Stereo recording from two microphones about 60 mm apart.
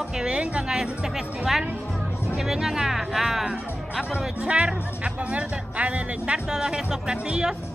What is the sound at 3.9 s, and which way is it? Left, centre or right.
Speech, centre.